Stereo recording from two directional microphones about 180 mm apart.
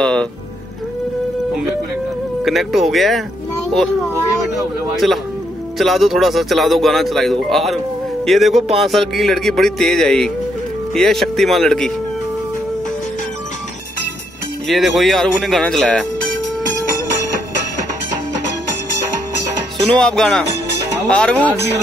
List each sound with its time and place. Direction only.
0.0 s music: 5° left (ahead or behind)
2.4 s speech: centre (ahead or behind)
5.0 s speech: centre (ahead or behind)
14.7 s speech: centre (ahead or behind)
19.9 s speech: 5° left (ahead or behind)